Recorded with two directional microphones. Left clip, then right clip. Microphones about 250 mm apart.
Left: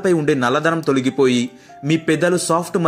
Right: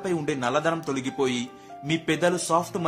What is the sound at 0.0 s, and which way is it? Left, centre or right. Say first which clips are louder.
Speech: left 10 dB; centre.